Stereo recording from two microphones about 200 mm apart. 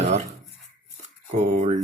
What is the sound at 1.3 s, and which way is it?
Speech, 35° right (ahead or behind).